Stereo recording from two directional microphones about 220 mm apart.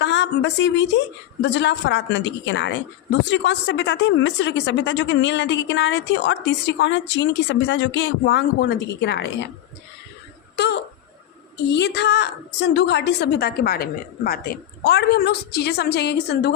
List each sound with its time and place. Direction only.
0.0 s speech: 55° left (ahead or behind)
10.6 s speech: 50° left (ahead or behind)